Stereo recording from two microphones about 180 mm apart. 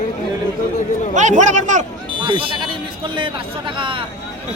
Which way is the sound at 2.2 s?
30° right (ahead or behind).